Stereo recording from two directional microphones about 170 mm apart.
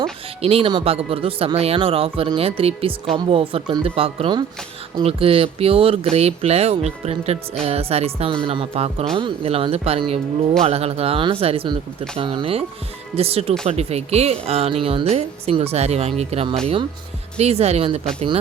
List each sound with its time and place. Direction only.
0.0 s a woman's voice: 35° right (ahead or behind)